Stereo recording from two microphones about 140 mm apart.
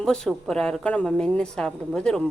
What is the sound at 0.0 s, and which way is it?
A woman's voice, 5° left (ahead or behind).